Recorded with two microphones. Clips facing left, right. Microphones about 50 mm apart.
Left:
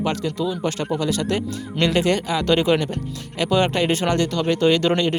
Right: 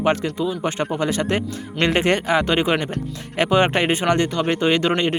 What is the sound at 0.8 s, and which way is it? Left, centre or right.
Speech, right.